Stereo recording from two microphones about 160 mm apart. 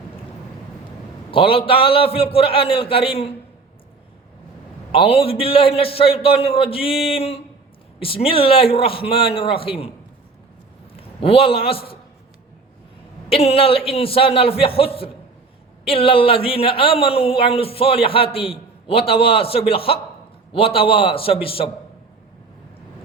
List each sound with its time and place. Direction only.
1.3 s speech: 35° left (ahead or behind)
4.9 s speech: 35° left (ahead or behind)
10.9 s a man's voice: 35° left (ahead or behind)
13.3 s speech: 35° left (ahead or behind)